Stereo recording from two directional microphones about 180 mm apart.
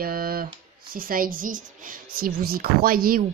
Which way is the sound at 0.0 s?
55° right (ahead or behind).